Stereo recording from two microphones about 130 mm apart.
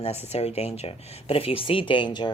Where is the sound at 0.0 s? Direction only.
55° left (ahead or behind).